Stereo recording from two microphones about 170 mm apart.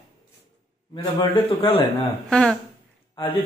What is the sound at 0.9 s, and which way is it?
A man's voice, 30° left (ahead or behind).